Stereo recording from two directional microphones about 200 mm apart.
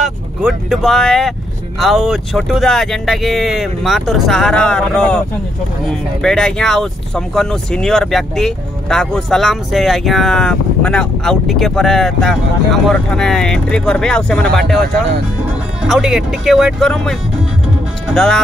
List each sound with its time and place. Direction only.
0.0 s speech: centre (ahead or behind)
15.9 s speech: centre (ahead or behind)